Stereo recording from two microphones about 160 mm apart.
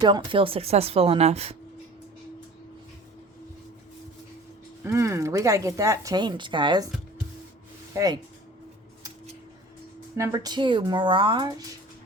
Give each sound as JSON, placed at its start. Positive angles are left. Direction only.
{"t": 0.0, "sound": "speech", "side_deg": -30}
{"t": 4.8, "sound": "speech", "side_deg": -20}
{"t": 7.9, "sound": "speech", "side_deg": -25}
{"t": 10.2, "sound": "speech", "side_deg": -25}